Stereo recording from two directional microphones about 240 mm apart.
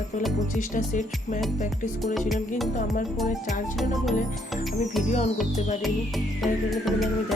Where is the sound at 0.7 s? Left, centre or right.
Left.